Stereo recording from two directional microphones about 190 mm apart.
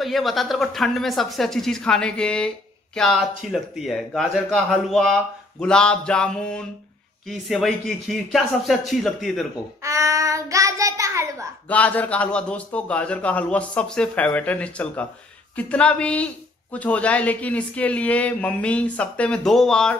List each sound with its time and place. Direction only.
0.0 s speech: centre (ahead or behind)
9.8 s child singing: 15° right (ahead or behind)
11.7 s a man's voice: 5° left (ahead or behind)